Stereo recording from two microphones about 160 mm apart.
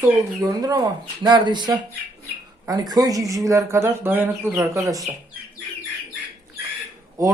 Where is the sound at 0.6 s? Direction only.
20° right (ahead or behind).